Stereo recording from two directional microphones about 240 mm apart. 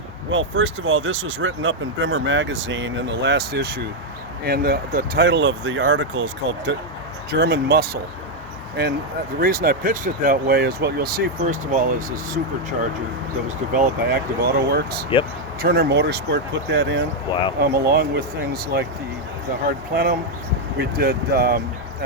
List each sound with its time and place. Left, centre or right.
0.3 s speech: right
13.7 s speech: right
20.7 s speech: right